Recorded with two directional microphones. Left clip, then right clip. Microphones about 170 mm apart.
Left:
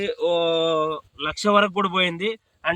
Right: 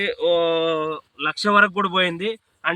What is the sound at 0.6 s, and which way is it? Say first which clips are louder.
Speech: left 1 dB; 45° left (ahead or behind).